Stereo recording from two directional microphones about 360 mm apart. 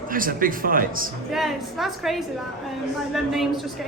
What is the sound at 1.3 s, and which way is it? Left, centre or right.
A woman's voice, centre.